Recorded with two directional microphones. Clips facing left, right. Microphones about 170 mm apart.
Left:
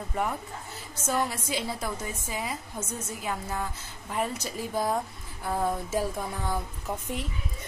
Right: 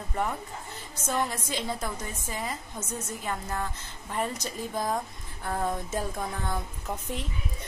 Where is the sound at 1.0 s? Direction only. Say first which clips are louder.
Left 1 dB; 5° left (ahead or behind).